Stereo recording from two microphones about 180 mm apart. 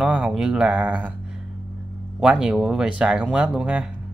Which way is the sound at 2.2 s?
5° right (ahead or behind).